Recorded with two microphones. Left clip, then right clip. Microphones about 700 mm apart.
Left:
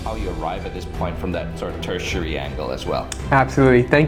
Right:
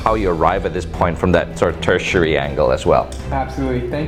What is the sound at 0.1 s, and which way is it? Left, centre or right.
Speech, right.